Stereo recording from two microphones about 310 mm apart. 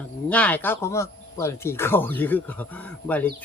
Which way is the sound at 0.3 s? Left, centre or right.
Centre.